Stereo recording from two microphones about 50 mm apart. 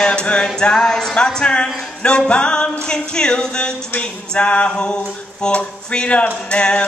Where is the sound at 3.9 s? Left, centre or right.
Left.